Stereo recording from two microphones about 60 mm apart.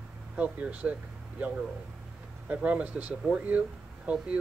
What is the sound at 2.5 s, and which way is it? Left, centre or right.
Speech, right.